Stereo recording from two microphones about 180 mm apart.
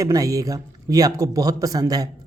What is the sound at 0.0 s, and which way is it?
A man's voice, 20° right (ahead or behind).